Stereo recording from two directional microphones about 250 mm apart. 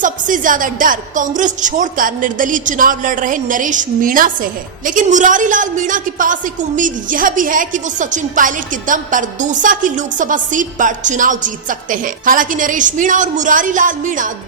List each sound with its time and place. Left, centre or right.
0.0 s a woman's voice: right